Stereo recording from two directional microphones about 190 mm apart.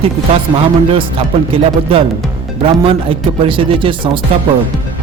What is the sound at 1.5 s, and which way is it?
A man's voice, 30° right (ahead or behind).